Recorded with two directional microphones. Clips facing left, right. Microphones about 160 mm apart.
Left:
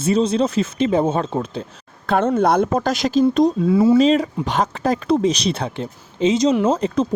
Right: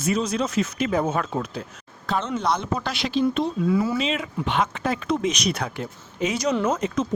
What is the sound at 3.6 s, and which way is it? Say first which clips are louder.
Speech: left 5 dB; 25° left (ahead or behind).